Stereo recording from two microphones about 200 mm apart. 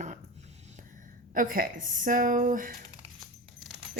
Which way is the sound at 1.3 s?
45° right (ahead or behind).